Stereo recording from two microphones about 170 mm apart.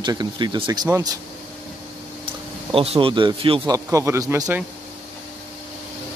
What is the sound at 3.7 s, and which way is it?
Speech, 15° right (ahead or behind).